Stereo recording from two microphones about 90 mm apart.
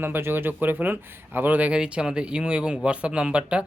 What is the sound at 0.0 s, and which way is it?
Speech, 25° right (ahead or behind).